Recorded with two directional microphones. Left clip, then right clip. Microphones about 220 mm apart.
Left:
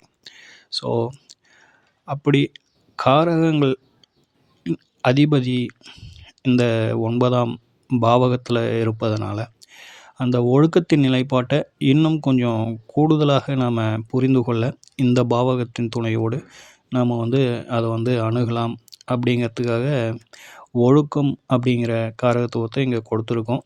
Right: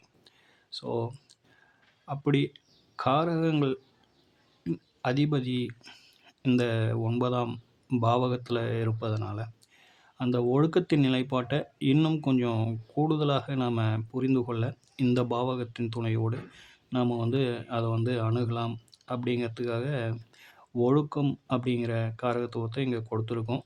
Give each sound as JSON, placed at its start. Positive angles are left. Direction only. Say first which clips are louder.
{"t": 0.3, "sound": "whispering", "louder": "left 13 dB", "side_deg": 30}
{"t": 2.0, "sound": "speech", "louder": "left 9 dB", "side_deg": 30}